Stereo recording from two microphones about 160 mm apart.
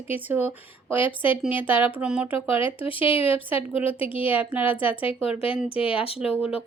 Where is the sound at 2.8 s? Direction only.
35° left (ahead or behind).